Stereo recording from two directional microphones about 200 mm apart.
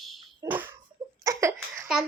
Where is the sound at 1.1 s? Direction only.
15° right (ahead or behind).